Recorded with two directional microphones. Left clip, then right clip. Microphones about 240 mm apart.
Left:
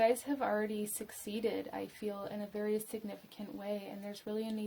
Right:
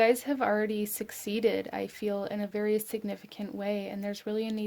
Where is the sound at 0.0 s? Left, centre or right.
Right.